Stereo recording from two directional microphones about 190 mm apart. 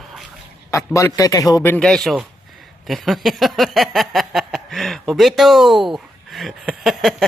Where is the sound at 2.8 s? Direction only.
Centre (ahead or behind).